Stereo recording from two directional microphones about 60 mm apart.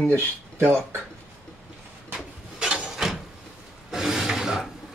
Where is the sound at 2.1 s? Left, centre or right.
Centre.